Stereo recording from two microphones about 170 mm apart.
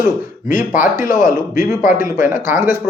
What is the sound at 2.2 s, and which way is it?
Speech, 15° right (ahead or behind).